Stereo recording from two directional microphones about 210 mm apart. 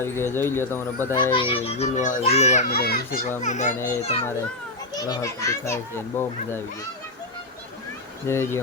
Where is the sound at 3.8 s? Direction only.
15° left (ahead or behind).